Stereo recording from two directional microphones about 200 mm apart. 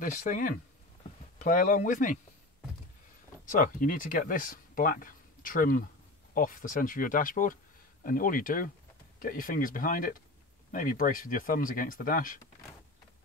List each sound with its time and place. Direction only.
0.0 s speech: 40° left (ahead or behind)
3.4 s speech: 40° left (ahead or behind)